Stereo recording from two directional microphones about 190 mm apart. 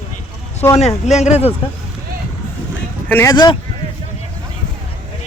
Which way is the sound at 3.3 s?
25° left (ahead or behind).